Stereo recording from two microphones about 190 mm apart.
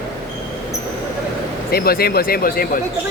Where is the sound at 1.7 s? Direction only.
55° left (ahead or behind).